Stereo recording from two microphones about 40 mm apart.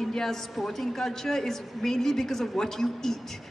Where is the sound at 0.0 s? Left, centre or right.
Centre.